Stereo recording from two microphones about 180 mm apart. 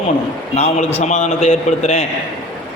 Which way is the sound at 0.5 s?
35° left (ahead or behind).